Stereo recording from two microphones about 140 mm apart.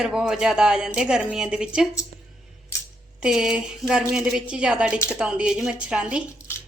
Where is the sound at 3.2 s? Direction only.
5° right (ahead or behind).